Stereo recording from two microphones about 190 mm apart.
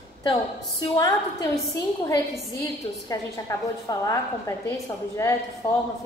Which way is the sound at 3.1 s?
20° left (ahead or behind).